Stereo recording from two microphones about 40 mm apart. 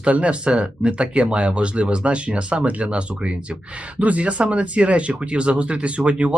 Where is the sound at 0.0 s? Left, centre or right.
Right.